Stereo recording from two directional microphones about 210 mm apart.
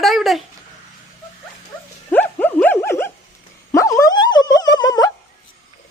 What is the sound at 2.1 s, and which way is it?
Dog, 10° left (ahead or behind).